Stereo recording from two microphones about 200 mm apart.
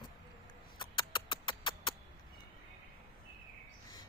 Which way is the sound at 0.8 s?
25° left (ahead or behind).